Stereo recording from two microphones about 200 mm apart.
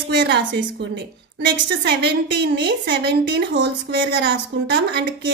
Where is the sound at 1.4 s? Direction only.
55° right (ahead or behind).